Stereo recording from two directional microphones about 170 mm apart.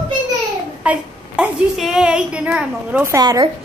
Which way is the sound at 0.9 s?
5° right (ahead or behind).